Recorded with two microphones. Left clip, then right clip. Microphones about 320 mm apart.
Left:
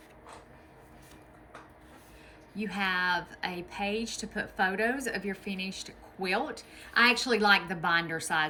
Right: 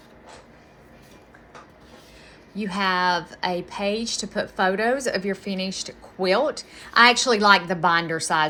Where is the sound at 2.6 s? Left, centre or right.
Centre.